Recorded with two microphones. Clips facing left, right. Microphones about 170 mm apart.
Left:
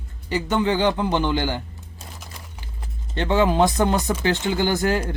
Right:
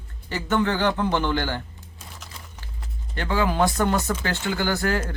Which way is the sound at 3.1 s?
20° left (ahead or behind).